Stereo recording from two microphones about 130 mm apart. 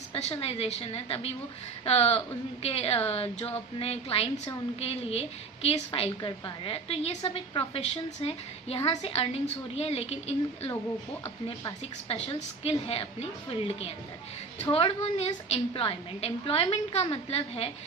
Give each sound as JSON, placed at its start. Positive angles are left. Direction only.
{"t": 0.1, "sound": "a woman's voice", "side_deg": 50}
{"t": 12.6, "sound": "a woman's voice", "side_deg": 50}